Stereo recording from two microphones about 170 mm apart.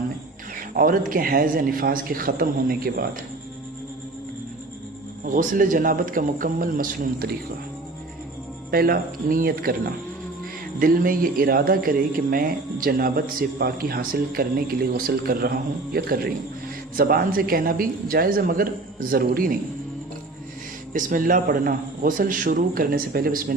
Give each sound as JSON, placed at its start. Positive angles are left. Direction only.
{"t": 0.5, "sound": "a man's voice", "side_deg": -55}
{"t": 5.2, "sound": "a man's voice", "side_deg": -55}
{"t": 8.7, "sound": "a man's voice", "side_deg": -60}
{"t": 20.9, "sound": "a man's voice", "side_deg": -55}